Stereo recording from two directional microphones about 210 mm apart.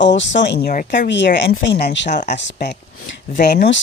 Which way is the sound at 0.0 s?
60° left (ahead or behind).